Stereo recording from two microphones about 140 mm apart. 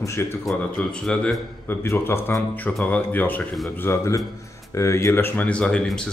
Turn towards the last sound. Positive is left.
turn(degrees=5)  # may be behind; listen again after turning